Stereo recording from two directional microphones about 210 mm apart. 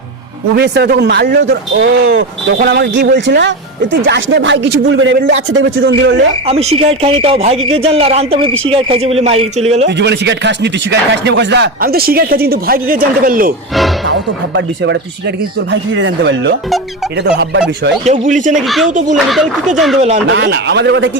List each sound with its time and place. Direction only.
0.5 s speech: 55° right (ahead or behind)
6.5 s speech: 30° right (ahead or behind)
10.0 s speech: 55° right (ahead or behind)
14.1 s speech: 60° right (ahead or behind)
18.0 s speech: 35° right (ahead or behind)
18.5 s speech: centre (ahead or behind)
18.9 s speech: 35° right (ahead or behind)
19.1 s speech: centre (ahead or behind)
20.2 s speech: 55° right (ahead or behind)